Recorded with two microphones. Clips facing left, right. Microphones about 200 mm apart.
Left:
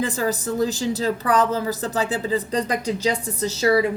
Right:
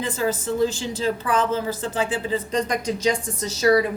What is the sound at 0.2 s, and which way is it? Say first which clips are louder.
A woman's voice: right 5 dB; 40° left (ahead or behind).